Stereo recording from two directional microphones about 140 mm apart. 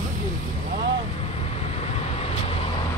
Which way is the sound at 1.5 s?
50° left (ahead or behind).